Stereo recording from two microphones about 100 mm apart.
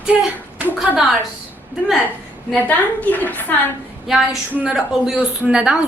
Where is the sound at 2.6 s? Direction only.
15° left (ahead or behind).